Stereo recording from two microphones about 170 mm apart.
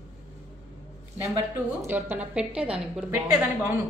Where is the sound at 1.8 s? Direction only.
10° right (ahead or behind).